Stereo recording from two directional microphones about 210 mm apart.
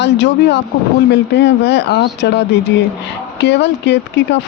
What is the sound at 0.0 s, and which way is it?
Speech, 55° left (ahead or behind).